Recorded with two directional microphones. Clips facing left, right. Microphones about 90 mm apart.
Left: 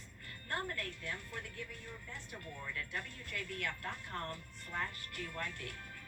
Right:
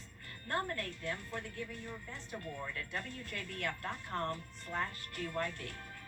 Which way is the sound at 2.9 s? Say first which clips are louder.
Right 2 dB; 30° right (ahead or behind).